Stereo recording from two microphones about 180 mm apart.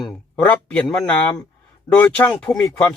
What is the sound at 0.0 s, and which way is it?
Speech, 5° left (ahead or behind).